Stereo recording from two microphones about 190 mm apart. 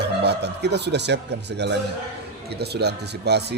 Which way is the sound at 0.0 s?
60° right (ahead or behind).